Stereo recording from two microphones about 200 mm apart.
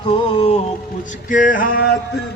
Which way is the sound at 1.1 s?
40° left (ahead or behind).